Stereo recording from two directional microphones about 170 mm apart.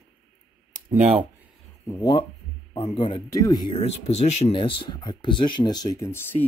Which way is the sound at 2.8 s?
30° left (ahead or behind).